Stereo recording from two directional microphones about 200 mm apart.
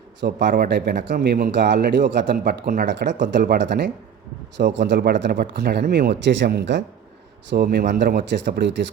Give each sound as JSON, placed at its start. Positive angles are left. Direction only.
{"t": 0.2, "sound": "speech", "side_deg": -60}
{"t": 1.7, "sound": "speech", "side_deg": -45}